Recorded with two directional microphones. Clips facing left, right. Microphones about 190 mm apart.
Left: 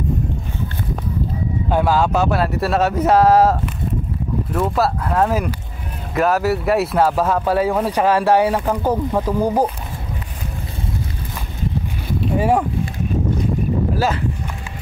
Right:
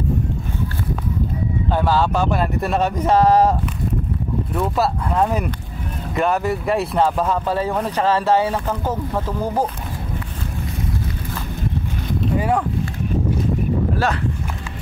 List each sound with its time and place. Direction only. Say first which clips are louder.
1.7 s speech: left 2 dB; 10° left (ahead or behind)
4.5 s speech: left 2 dB; centre (ahead or behind)
12.4 s speech: left 4 dB; 25° left (ahead or behind)